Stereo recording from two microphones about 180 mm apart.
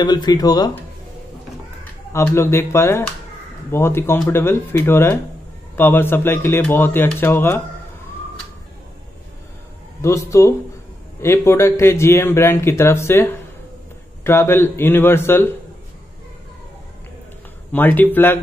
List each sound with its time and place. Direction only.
0.0 s speech: 25° left (ahead or behind)
2.1 s speech: 15° left (ahead or behind)
10.0 s speech: 15° left (ahead or behind)
17.7 s speech: 10° left (ahead or behind)